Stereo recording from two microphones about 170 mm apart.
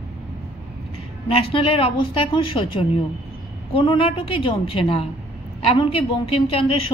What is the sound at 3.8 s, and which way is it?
A woman's voice, 30° left (ahead or behind).